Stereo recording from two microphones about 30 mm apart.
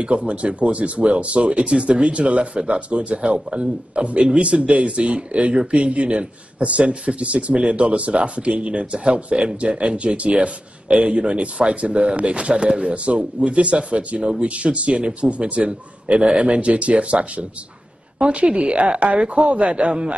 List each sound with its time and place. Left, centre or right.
0.0 s a man's voice: right
10.9 s a man's voice: right
16.2 s speech: right
16.5 s speech: right